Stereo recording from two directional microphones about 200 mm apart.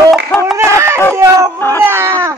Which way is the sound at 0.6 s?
15° right (ahead or behind).